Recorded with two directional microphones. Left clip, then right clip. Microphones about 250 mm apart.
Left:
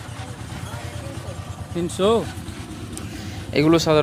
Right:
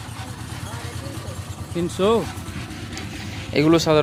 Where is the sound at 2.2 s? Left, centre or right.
Right.